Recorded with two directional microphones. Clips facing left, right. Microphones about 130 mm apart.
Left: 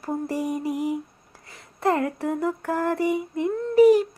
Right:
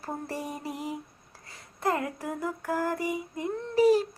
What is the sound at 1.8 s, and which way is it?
Speech, 30° left (ahead or behind).